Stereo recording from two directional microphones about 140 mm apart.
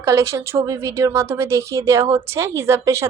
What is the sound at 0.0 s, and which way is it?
A woman's voice, 20° right (ahead or behind).